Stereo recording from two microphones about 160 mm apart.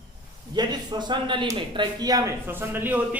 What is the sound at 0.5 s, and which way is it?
A man's voice, 25° right (ahead or behind).